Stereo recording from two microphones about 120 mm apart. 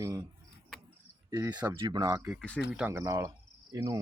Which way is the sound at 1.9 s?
30° right (ahead or behind).